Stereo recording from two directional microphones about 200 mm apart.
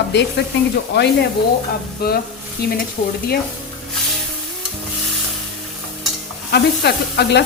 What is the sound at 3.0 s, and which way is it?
Speech, 45° left (ahead or behind).